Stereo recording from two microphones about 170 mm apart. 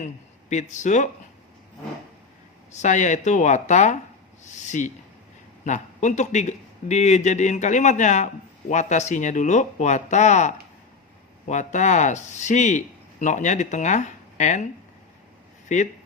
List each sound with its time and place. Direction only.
0.5 s speech: 45° left (ahead or behind)
2.7 s speech: 45° left (ahead or behind)
15.7 s speech: 45° left (ahead or behind)